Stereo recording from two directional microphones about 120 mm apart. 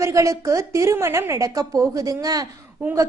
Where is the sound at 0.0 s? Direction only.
25° right (ahead or behind).